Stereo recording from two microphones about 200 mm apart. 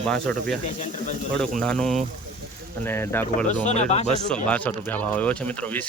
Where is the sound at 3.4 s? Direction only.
40° left (ahead or behind).